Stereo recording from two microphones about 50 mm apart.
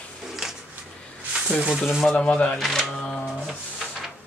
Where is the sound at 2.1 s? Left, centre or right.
Left.